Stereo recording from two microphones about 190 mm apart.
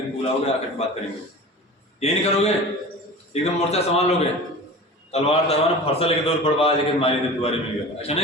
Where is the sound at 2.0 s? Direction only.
35° left (ahead or behind).